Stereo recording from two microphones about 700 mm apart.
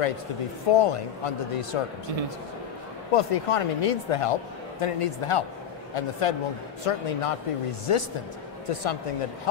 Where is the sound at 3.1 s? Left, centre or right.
Left.